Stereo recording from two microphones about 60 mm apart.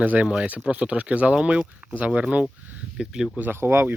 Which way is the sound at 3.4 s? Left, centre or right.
Right.